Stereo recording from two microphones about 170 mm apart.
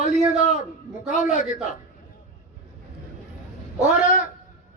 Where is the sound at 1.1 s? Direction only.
50° left (ahead or behind).